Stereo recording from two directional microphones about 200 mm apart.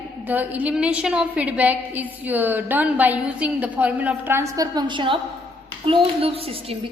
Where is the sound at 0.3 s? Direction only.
10° right (ahead or behind).